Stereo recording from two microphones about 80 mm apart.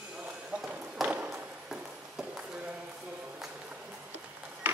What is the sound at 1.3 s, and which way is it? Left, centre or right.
Horse, centre.